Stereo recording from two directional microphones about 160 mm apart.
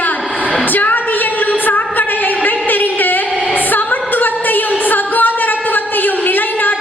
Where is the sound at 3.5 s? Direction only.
10° left (ahead or behind).